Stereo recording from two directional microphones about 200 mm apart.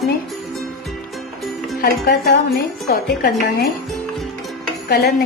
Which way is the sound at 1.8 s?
50° left (ahead or behind).